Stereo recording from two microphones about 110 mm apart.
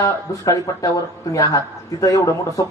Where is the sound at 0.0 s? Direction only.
30° left (ahead or behind).